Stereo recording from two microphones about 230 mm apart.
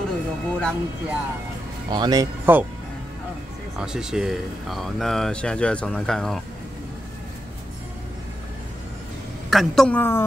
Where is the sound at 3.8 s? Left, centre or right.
Centre.